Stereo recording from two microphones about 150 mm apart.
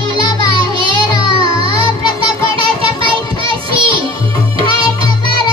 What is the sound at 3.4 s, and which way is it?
Child singing, 35° right (ahead or behind).